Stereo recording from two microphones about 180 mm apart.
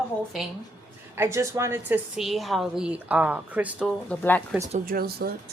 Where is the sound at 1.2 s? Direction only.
15° right (ahead or behind).